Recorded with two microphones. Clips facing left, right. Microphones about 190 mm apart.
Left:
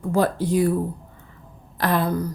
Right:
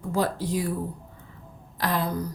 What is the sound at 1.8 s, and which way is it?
Speech, 60° left (ahead or behind).